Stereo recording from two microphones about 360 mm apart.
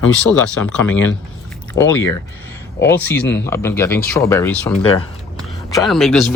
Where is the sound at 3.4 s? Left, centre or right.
Centre.